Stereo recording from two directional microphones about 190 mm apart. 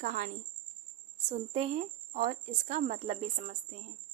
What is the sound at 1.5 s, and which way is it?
A woman's voice, 35° right (ahead or behind).